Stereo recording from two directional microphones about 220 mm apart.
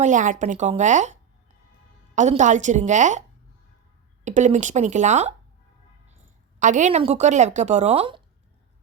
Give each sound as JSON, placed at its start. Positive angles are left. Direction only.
{"t": 0.0, "sound": "a woman's voice", "side_deg": -35}
{"t": 6.6, "sound": "a woman's voice", "side_deg": -35}